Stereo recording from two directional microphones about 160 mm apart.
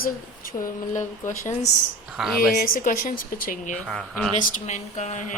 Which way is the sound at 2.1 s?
5° right (ahead or behind).